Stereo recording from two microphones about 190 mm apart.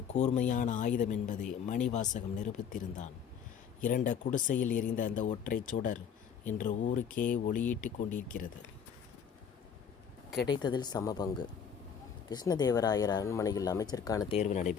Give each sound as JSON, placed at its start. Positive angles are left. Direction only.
{"t": 0.1, "sound": "speech", "side_deg": 40}
{"t": 10.4, "sound": "speech", "side_deg": 25}
{"t": 14.3, "sound": "speech", "side_deg": 35}